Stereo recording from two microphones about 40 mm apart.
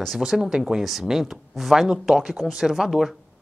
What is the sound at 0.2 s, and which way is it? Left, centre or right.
A woman's voice, centre.